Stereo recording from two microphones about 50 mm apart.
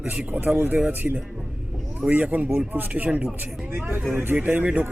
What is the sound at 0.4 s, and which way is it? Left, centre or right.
Speech, right.